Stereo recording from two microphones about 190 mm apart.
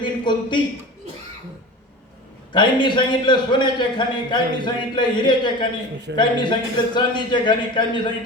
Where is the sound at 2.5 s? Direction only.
25° left (ahead or behind).